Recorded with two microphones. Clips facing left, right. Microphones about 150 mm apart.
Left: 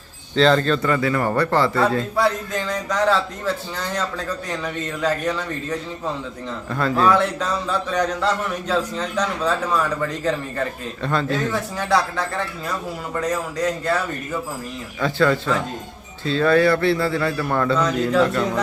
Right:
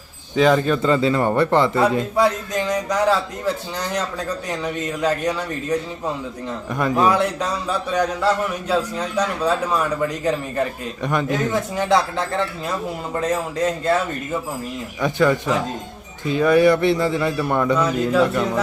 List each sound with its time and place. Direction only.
0.3 s a man's voice: 10° right (ahead or behind)
0.8 s a man's voice: 25° right (ahead or behind)
15.0 s a man's voice: 15° right (ahead or behind)